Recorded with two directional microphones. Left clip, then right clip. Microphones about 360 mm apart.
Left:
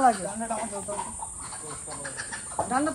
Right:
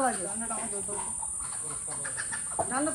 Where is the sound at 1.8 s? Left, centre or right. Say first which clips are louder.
Left 1 dB; left.